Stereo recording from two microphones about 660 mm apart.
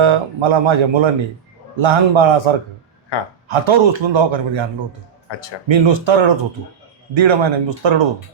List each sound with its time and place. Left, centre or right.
0.0 s speech: right
5.3 s speech: left
5.6 s speech: right